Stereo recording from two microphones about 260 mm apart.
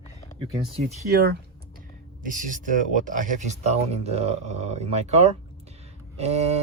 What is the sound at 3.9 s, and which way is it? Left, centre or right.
Speech, right.